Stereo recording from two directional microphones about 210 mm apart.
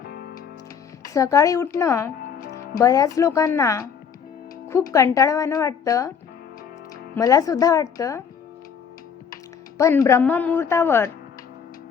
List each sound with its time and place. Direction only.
1.0 s a woman's voice: 15° left (ahead or behind)
7.2 s a woman's voice: 15° left (ahead or behind)
9.7 s a woman's voice: 15° left (ahead or behind)